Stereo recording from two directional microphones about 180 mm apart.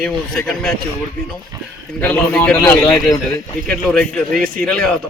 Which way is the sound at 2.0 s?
5° left (ahead or behind).